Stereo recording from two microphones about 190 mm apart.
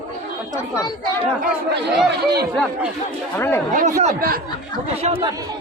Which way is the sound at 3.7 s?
40° right (ahead or behind).